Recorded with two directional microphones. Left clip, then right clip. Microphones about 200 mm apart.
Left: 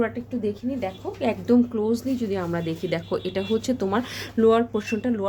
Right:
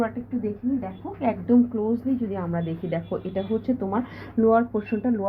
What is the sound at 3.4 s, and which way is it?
Speech, 40° left (ahead or behind).